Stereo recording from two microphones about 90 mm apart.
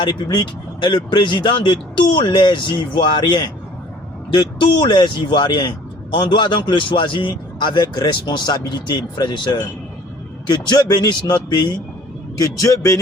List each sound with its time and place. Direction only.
0.0 s a man's voice: 60° left (ahead or behind)
12.4 s speech: 40° left (ahead or behind)